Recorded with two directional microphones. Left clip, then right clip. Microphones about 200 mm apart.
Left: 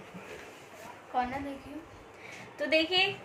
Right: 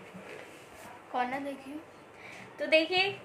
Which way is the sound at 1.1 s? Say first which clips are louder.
Left 1 dB; 40° right (ahead or behind).